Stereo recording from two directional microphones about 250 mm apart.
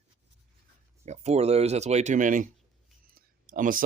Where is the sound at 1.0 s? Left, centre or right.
Right.